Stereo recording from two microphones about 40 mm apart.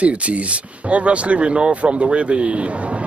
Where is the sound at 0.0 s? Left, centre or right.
Right.